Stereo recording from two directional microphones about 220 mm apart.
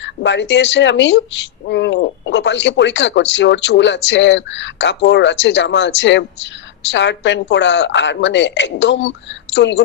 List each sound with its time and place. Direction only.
0.0 s speech: 55° left (ahead or behind)